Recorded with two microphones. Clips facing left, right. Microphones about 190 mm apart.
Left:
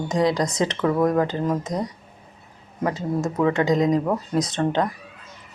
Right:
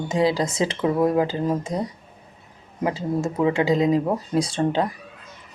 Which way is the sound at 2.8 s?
25° right (ahead or behind).